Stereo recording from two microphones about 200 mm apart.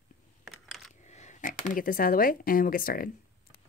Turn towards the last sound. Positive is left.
turn(degrees=45)  # may be behind; listen again after turning